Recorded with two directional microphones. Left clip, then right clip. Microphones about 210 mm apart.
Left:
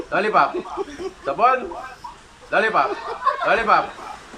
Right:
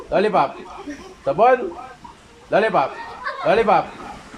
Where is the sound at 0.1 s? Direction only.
25° right (ahead or behind).